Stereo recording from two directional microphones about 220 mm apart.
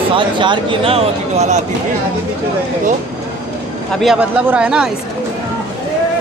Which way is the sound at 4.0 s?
5° right (ahead or behind).